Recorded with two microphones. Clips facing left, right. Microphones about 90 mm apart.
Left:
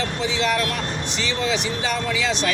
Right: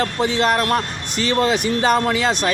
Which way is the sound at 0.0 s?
50° right (ahead or behind).